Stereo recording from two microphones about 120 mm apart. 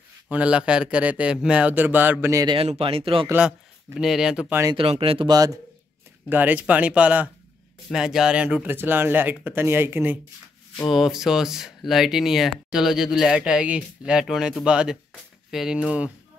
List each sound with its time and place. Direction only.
0.3 s speech: 10° right (ahead or behind)
2.4 s speech: 50° right (ahead or behind)
3.9 s speech: 5° right (ahead or behind)
4.7 s speech: 50° right (ahead or behind)
5.3 s a man's voice: 30° right (ahead or behind)
6.2 s speech: 15° right (ahead or behind)
10.9 s speech: centre (ahead or behind)